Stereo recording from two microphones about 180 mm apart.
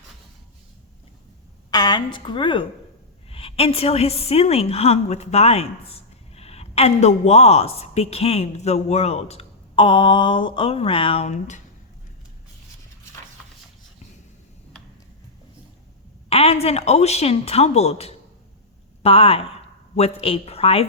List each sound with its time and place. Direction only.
1.7 s a woman's voice: 20° left (ahead or behind); by 11.6 s 40° left (ahead or behind)
16.3 s a woman's voice: 35° left (ahead or behind)